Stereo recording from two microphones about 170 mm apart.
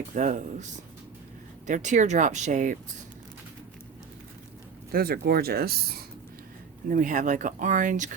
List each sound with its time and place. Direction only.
0.1 s speech: 50° right (ahead or behind)
4.9 s speech: 60° right (ahead or behind)
6.8 s speech: 50° right (ahead or behind)